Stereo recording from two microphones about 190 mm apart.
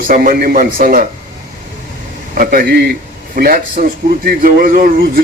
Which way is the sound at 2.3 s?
50° right (ahead or behind).